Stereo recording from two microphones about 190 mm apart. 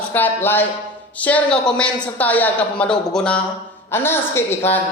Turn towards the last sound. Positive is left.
turn(degrees=10)  # may be behind; listen again after turning